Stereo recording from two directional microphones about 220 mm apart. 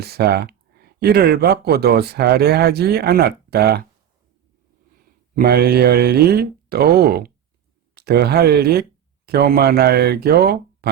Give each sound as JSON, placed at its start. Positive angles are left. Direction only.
{"t": 0.0, "sound": "speech", "side_deg": -45}
{"t": 5.4, "sound": "speech", "side_deg": -45}